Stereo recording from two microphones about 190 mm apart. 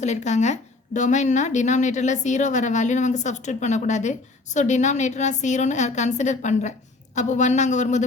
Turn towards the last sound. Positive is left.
turn(degrees=40)  # may be behind; listen again after turning